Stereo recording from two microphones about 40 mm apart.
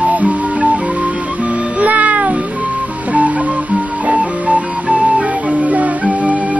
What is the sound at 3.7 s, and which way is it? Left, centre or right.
Music, right.